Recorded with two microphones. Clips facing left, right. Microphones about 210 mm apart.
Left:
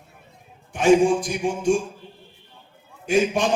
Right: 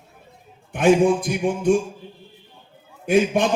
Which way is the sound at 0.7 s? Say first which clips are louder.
Even; 60° right (ahead or behind).